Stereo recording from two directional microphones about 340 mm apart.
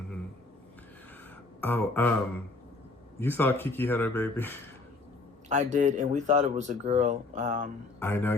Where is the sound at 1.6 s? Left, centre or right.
Centre.